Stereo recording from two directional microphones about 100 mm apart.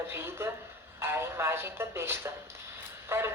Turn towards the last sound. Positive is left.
turn(degrees=-25)  # may be behind; listen again after turning